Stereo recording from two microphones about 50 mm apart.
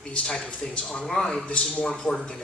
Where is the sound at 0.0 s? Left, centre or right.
Centre.